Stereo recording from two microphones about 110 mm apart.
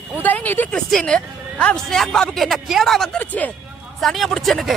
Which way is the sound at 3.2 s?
15° left (ahead or behind).